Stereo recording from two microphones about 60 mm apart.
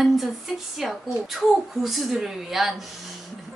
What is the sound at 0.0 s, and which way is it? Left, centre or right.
A woman's voice, centre.